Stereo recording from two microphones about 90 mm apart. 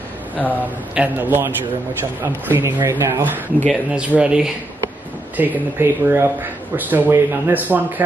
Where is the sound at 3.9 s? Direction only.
10° right (ahead or behind).